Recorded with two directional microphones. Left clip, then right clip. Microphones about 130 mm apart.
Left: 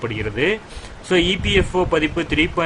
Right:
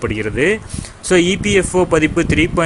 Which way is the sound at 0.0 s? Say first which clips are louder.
Right 4 dB; 35° right (ahead or behind).